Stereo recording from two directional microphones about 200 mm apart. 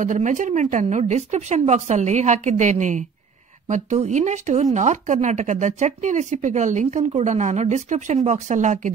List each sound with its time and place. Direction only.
0.0 s speech: 40° right (ahead or behind)